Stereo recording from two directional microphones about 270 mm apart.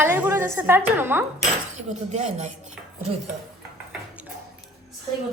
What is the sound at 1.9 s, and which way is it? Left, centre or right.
Speech, right.